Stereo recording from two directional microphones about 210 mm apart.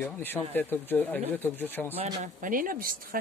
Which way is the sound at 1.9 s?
30° right (ahead or behind).